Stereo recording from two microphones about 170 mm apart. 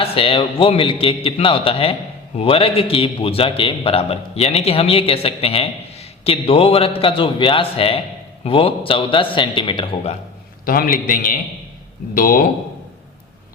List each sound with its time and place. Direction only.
0.0 s a man's voice: 35° left (ahead or behind)
10.7 s a man's voice: 60° left (ahead or behind)